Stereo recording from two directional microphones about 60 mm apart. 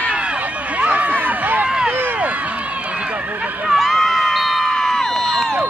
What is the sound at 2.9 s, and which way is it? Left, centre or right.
Run, right.